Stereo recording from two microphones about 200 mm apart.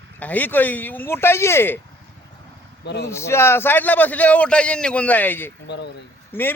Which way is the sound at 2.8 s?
60° left (ahead or behind).